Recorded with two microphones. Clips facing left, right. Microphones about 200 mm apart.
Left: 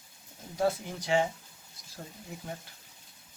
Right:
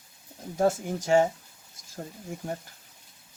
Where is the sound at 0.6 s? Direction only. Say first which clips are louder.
Right 4 dB; 45° right (ahead or behind).